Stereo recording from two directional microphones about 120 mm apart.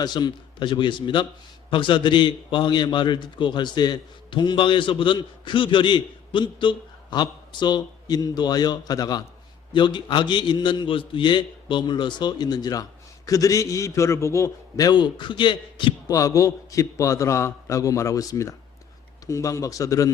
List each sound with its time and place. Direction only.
0.0 s a man's voice: 35° left (ahead or behind)
16.1 s a man's voice: 25° left (ahead or behind)